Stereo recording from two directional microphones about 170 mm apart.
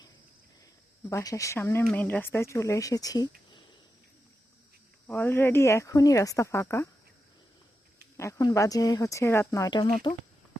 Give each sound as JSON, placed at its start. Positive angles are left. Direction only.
{"t": 1.1, "sound": "speech", "side_deg": 20}
{"t": 5.0, "sound": "speech", "side_deg": 10}
{"t": 8.1, "sound": "speech", "side_deg": 20}